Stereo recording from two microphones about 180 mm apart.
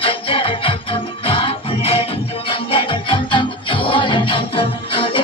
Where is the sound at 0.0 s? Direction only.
30° left (ahead or behind).